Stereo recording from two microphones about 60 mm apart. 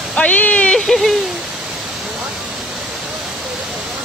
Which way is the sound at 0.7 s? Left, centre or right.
Centre.